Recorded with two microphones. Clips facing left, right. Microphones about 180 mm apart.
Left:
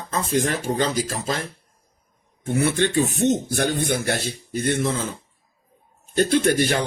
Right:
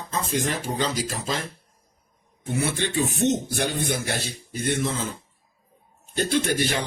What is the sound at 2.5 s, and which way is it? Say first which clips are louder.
A man's voice: left 5 dB; 55° left (ahead or behind).